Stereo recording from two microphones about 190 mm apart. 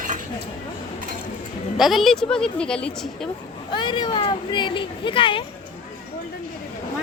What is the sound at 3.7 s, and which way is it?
Speech, 25° left (ahead or behind).